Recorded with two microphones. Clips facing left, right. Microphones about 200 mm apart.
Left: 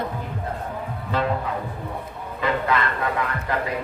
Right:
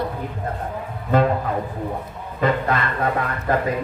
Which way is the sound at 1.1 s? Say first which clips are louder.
Right 7 dB; 50° right (ahead or behind).